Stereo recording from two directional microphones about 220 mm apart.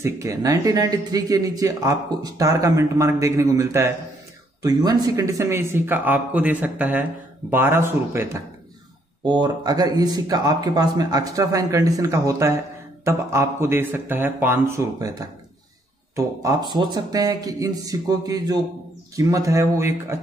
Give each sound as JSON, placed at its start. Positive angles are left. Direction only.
{"t": 0.0, "sound": "speech", "side_deg": -15}